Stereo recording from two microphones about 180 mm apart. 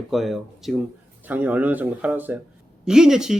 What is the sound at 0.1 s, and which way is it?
Speech, centre (ahead or behind).